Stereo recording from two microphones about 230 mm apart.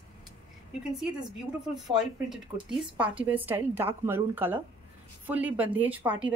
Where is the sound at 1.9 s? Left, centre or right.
Centre.